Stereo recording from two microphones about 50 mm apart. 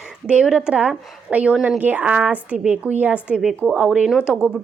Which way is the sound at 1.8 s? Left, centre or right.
Right.